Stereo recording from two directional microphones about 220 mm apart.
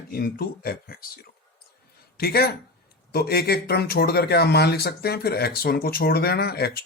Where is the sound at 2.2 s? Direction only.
45° left (ahead or behind).